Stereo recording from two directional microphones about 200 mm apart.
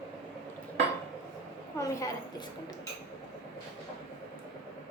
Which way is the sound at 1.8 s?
15° left (ahead or behind).